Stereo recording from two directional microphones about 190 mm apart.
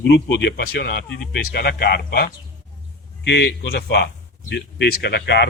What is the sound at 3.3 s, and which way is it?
A man's voice, 65° left (ahead or behind).